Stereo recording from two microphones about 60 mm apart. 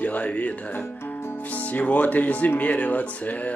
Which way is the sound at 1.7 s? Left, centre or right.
Left.